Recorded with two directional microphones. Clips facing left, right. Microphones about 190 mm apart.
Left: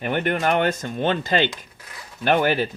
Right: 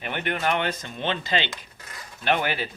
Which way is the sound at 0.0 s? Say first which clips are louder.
Left 5 dB; 45° left (ahead or behind).